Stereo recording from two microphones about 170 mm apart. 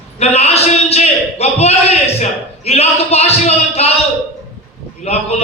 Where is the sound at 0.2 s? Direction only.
40° left (ahead or behind).